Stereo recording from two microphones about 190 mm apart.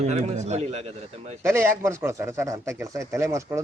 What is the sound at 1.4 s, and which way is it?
Speech, 15° right (ahead or behind).